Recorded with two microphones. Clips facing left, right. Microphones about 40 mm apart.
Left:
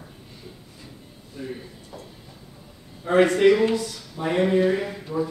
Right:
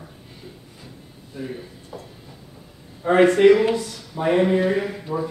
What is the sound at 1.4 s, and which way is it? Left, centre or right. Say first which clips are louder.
Speech: right 2 dB; centre.